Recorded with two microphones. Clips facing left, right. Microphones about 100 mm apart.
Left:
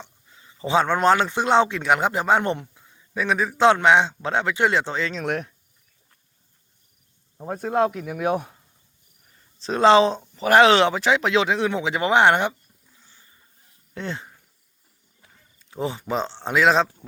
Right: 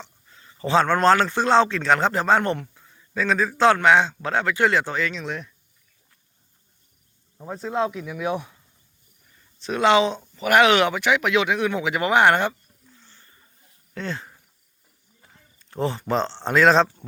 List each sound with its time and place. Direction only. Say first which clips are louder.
0.0 s a man's voice: even; 15° left (ahead or behind)
5.2 s speech: left 5 dB; 60° left (ahead or behind)
7.4 s speech: left 3 dB; 50° left (ahead or behind)
9.6 s a man's voice: left 3 dB; 30° left (ahead or behind)
13.0 s a sound: left 1 dB; 10° left (ahead or behind)
13.9 s speech: even; 20° left (ahead or behind)
15.2 s speech: right 2 dB; 5° left (ahead or behind)